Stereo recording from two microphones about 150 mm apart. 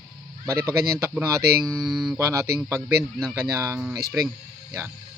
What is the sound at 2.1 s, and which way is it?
Speech, 20° right (ahead or behind).